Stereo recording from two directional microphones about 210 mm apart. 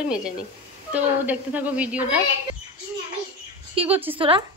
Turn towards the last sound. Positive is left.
turn(degrees=-25)  # may be behind; listen again after turning